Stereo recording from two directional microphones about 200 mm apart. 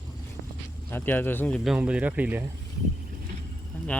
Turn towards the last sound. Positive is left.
turn(degrees=5)  # may be behind; listen again after turning